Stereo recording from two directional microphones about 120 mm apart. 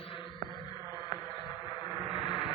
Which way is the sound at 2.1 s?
40° left (ahead or behind).